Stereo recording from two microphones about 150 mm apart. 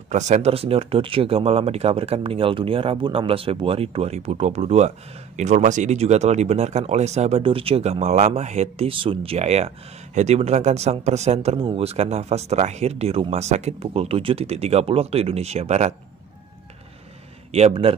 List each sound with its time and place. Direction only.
0.1 s speech: 50° right (ahead or behind)
17.5 s speech: 40° right (ahead or behind)